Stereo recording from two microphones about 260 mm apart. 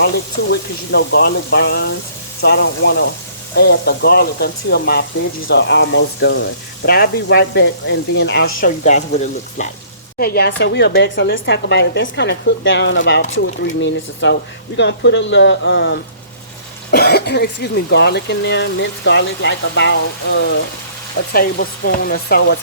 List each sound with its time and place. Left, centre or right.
0.5 s speech: left
21.3 s speech: left